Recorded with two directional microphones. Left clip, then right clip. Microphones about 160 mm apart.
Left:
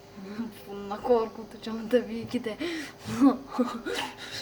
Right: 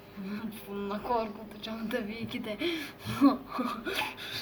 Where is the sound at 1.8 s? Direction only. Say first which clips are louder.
Left 10 dB; 55° left (ahead or behind).